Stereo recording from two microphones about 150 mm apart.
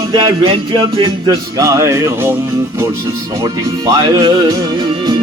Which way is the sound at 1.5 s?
20° right (ahead or behind).